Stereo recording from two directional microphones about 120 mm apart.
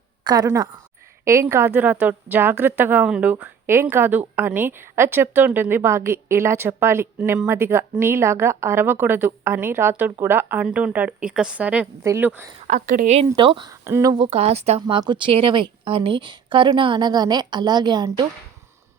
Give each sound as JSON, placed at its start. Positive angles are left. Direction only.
{"t": 0.3, "sound": "a woman's voice", "side_deg": -30}
{"t": 12.6, "sound": "a woman's voice", "side_deg": -90}
{"t": 13.3, "sound": "a woman's voice", "side_deg": -40}
{"t": 13.7, "sound": "speech", "side_deg": -25}
{"t": 14.3, "sound": "speech", "side_deg": -55}
{"t": 14.8, "sound": "a woman's voice", "side_deg": -40}